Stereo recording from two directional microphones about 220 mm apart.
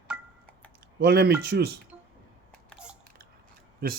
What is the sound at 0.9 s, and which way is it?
Speech, 45° right (ahead or behind).